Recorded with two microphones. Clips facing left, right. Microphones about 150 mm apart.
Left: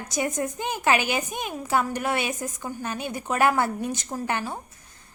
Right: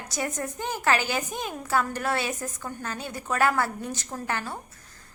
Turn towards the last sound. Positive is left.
turn(degrees=20)  # may be behind; listen again after turning